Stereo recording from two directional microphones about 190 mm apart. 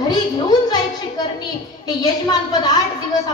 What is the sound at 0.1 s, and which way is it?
Speech, 20° left (ahead or behind).